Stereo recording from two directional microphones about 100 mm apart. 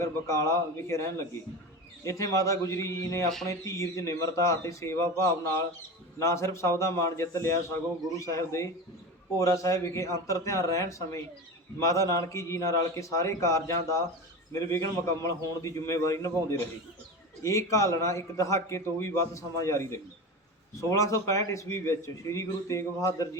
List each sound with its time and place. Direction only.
0.0 s a man's voice: 30° left (ahead or behind)